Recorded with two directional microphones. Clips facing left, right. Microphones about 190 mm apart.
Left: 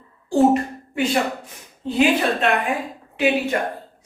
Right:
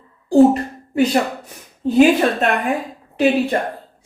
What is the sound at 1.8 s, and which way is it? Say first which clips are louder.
Speech: right 8 dB; 45° right (ahead or behind).